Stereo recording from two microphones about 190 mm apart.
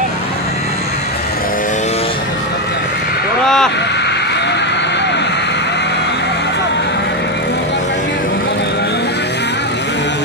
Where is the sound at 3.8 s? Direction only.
65° left (ahead or behind).